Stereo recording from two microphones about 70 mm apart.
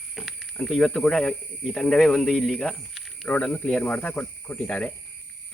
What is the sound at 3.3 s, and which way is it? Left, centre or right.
Speech, left.